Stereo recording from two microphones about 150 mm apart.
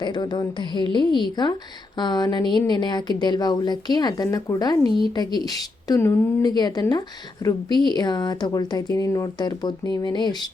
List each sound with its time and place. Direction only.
0.0 s a woman's voice: 30° left (ahead or behind)